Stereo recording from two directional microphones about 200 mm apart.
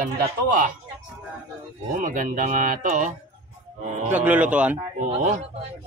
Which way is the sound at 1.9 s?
40° right (ahead or behind).